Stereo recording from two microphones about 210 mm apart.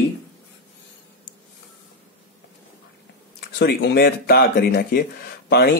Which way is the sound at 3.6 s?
50° left (ahead or behind).